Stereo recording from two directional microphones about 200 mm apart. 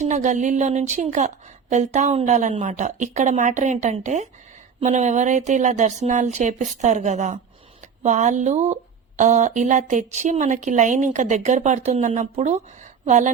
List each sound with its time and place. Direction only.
0.0 s speech: 35° right (ahead or behind)